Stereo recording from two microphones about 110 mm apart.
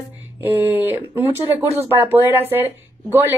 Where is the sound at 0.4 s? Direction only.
20° right (ahead or behind).